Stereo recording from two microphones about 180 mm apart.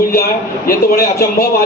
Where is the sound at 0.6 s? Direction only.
55° left (ahead or behind).